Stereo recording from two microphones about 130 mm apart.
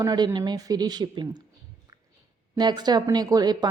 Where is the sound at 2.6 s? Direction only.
35° right (ahead or behind).